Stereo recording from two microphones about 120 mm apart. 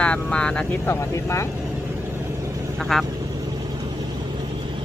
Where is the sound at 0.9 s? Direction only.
25° left (ahead or behind).